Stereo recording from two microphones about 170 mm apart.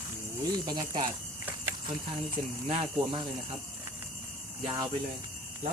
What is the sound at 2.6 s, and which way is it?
Speech, 35° right (ahead or behind).